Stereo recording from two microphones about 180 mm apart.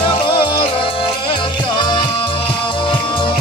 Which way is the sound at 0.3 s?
30° left (ahead or behind).